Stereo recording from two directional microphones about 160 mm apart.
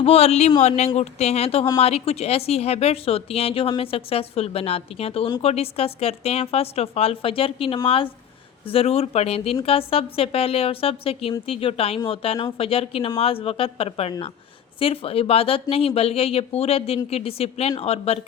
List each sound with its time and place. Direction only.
0.0 s a woman's voice: 40° left (ahead or behind)